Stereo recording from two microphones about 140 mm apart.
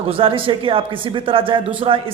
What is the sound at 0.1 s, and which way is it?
A man's voice, 40° right (ahead or behind).